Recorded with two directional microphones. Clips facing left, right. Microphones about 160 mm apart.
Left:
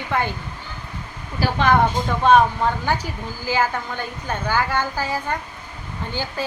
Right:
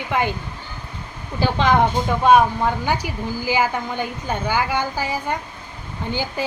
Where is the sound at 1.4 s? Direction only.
20° right (ahead or behind).